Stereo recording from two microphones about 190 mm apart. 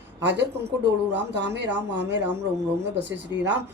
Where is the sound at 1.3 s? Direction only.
65° right (ahead or behind).